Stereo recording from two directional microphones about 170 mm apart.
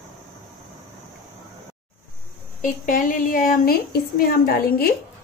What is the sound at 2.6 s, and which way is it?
A woman's voice, 50° left (ahead or behind).